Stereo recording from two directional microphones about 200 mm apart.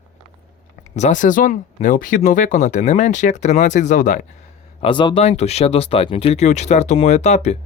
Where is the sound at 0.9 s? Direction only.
35° left (ahead or behind).